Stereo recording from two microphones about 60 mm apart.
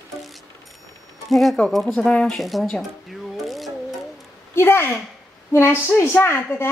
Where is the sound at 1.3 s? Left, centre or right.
Centre.